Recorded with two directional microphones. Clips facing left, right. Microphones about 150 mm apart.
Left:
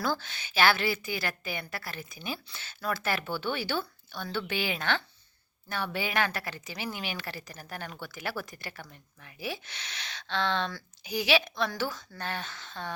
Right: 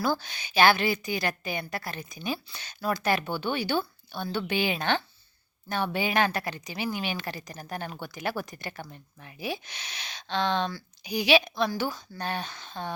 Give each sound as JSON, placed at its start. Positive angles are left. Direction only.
{"t": 0.0, "sound": "a woman's voice", "side_deg": -15}